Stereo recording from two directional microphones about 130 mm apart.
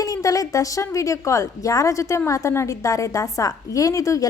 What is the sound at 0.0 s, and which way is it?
Speech, 30° left (ahead or behind).